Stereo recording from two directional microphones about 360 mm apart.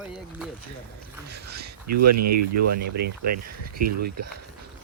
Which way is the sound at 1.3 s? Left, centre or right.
Right.